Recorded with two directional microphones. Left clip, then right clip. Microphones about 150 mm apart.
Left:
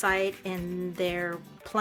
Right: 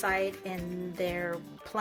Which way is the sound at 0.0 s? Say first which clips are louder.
Left 3 dB; 30° left (ahead or behind).